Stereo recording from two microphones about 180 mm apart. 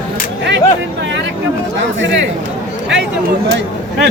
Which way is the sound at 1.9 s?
90° right.